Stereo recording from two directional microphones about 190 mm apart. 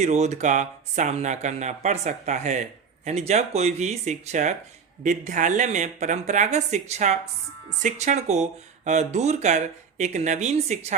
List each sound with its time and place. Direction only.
0.0 s speech: 35° right (ahead or behind)